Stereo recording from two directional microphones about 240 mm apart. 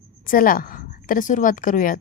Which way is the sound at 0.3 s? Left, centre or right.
Left.